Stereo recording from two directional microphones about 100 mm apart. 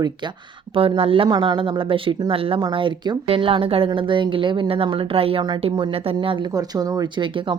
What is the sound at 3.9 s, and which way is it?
A woman's voice, 55° right (ahead or behind).